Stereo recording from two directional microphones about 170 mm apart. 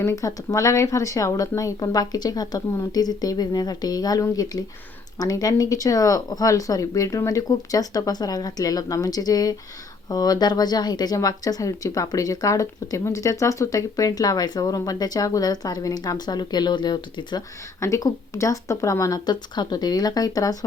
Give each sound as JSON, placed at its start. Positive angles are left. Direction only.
{"t": 0.0, "sound": "speech", "side_deg": 15}